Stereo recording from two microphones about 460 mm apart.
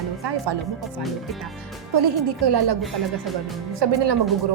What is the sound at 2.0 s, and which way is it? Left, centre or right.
Speech, right.